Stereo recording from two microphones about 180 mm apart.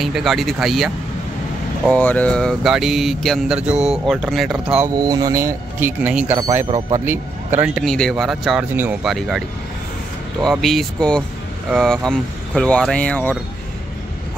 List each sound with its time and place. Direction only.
0.0 s speech: centre (ahead or behind)
4.9 s speech: 20° right (ahead or behind)
6.3 s speech: 20° right (ahead or behind)
7.1 s speech: 10° right (ahead or behind)
10.4 s speech: centre (ahead or behind)